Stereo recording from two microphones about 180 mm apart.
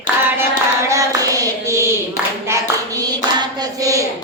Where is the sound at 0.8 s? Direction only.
20° right (ahead or behind).